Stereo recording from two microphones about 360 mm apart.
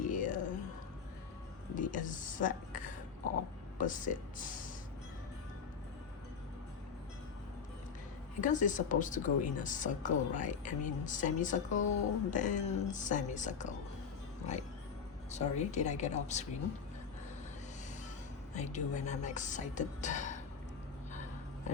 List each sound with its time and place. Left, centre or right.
0.1 s a sound: left
1.7 s speech: left
8.4 s speech: left
15.3 s speech: centre
18.5 s speech: centre